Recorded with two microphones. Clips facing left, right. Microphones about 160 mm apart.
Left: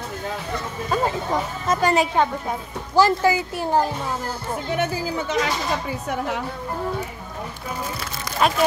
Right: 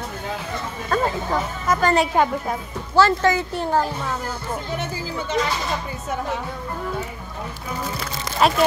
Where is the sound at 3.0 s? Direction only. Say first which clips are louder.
Even; 10° left (ahead or behind).